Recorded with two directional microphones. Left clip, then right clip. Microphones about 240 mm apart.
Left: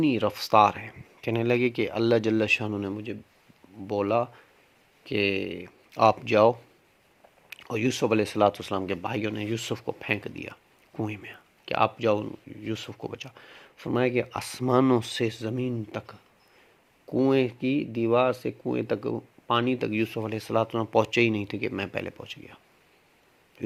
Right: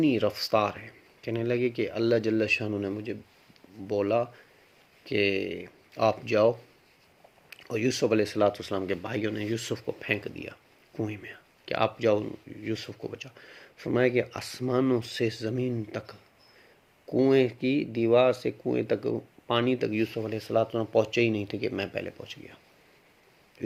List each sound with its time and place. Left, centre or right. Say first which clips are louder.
0.0 s speech: even; left